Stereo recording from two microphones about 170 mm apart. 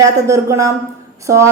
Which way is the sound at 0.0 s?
20° right (ahead or behind).